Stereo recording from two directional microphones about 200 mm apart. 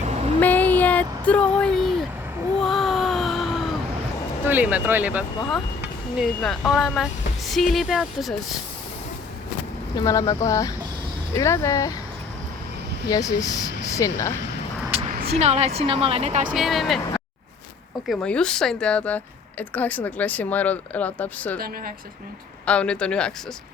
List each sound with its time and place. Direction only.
0.4 s vehicle: 10° left (ahead or behind)
2.6 s a sound: centre (ahead or behind)
4.4 s speech: 10° right (ahead or behind)
9.9 s a woman's voice: 15° left (ahead or behind)
13.1 s a woman's voice: 15° left (ahead or behind)
15.0 s speech: 35° right (ahead or behind)
16.6 s speech: centre (ahead or behind)
18.1 s a woman's voice: 5° left (ahead or behind)
22.6 s speech: 5° left (ahead or behind)